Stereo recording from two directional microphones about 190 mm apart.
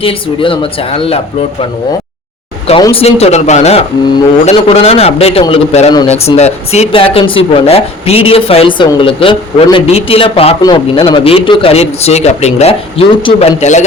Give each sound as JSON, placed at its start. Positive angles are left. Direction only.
{"t": 0.0, "sound": "speech", "side_deg": 30}
{"t": 2.8, "sound": "speech", "side_deg": 30}